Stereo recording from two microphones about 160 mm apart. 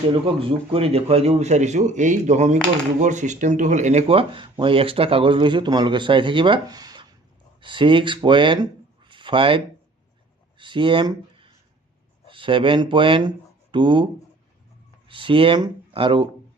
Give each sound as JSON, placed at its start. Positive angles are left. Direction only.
{"t": 0.1, "sound": "a man's voice", "side_deg": -35}